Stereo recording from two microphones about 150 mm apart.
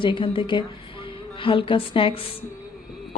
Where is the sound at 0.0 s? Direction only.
35° left (ahead or behind).